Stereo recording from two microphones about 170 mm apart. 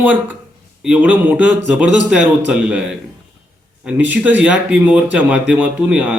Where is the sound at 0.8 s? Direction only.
5° right (ahead or behind).